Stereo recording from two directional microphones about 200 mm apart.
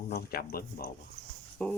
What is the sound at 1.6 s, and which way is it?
Speech, 5° left (ahead or behind).